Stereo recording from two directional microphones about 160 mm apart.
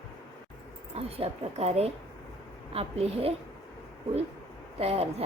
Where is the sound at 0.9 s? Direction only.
40° right (ahead or behind).